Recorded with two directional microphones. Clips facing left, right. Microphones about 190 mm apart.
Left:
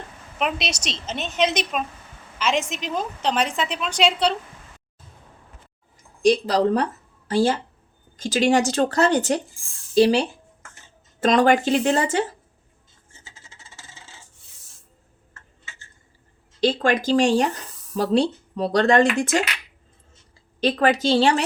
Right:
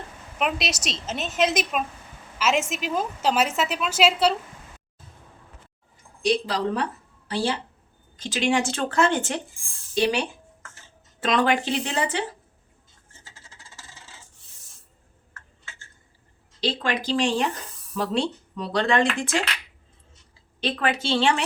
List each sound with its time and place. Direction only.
0.3 s a woman's voice: centre (ahead or behind)
6.2 s speech: 45° left (ahead or behind)
16.6 s speech: 50° left (ahead or behind)
20.6 s speech: 40° left (ahead or behind)